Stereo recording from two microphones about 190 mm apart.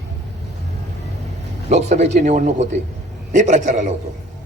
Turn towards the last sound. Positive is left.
turn(degrees=-40)  # may be behind; listen again after turning